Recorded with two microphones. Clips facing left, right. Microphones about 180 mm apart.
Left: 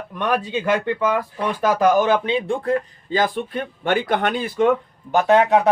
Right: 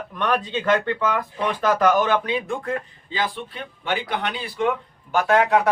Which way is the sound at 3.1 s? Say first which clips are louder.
Left 6 dB; 45° left (ahead or behind).